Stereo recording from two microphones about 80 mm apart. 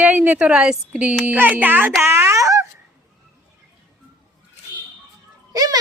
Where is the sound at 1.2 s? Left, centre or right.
Right.